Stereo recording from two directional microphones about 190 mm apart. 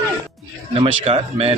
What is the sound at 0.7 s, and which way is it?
Speech, 30° right (ahead or behind).